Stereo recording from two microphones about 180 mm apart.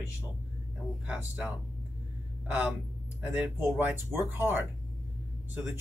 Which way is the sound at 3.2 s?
5° right (ahead or behind).